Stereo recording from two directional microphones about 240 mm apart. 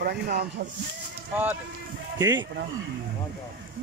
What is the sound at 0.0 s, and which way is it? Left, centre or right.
Speech, right.